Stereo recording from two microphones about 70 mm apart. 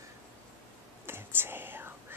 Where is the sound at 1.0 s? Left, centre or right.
Right.